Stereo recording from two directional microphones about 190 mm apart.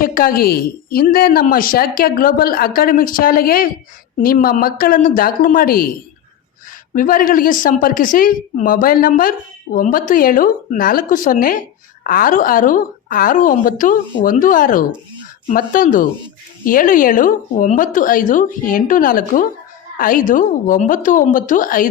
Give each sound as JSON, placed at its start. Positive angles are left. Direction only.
{"t": 0.0, "sound": "a woman's voice", "side_deg": 50}
{"t": 6.9, "sound": "a woman's voice", "side_deg": 45}